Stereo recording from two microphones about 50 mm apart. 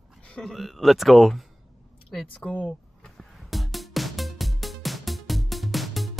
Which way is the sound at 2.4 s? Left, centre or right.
Left.